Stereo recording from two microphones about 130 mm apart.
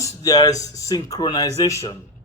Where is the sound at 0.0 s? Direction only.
30° left (ahead or behind).